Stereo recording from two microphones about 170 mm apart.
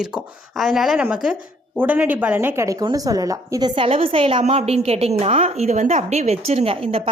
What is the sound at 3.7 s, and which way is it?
A woman's voice, 30° right (ahead or behind).